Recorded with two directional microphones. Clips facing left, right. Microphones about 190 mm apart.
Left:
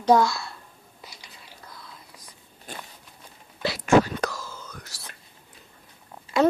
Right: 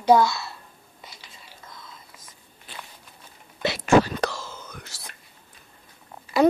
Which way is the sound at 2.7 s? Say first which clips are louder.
Left 3 dB; 45° left (ahead or behind).